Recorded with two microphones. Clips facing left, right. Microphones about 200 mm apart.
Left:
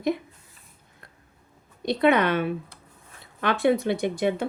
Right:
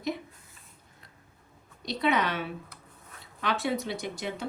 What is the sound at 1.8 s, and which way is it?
Speech, 55° left (ahead or behind).